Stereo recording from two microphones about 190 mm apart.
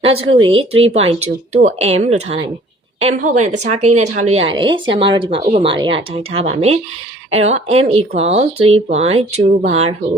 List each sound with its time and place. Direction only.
0.0 s speech: 30° right (ahead or behind)